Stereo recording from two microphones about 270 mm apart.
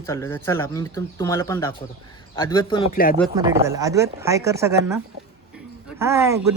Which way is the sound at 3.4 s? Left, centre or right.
Centre.